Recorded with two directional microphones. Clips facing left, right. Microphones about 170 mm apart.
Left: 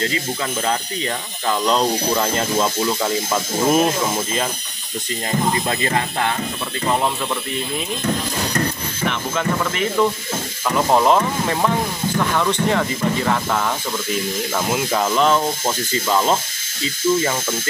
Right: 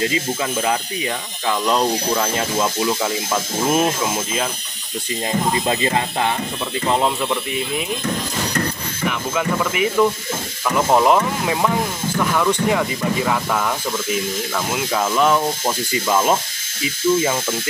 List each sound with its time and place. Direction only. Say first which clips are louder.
0.6 s speech: right 1 dB; 10° right (ahead or behind)
5.5 s speech: right 1 dB; 20° right (ahead or behind)
9.3 s speech: right 3 dB; 5° right (ahead or behind)
14.7 s speech: left 1 dB; centre (ahead or behind)